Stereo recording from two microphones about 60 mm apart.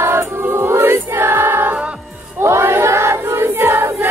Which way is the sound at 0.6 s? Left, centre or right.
Right.